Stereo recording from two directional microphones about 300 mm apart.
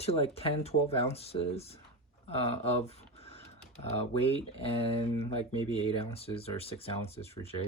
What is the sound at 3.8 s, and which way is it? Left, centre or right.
Speech, centre.